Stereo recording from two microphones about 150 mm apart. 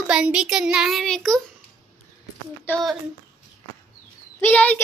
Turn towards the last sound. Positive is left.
turn(degrees=10)  # may be behind; listen again after turning